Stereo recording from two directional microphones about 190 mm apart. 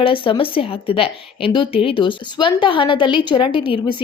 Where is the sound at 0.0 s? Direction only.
30° left (ahead or behind).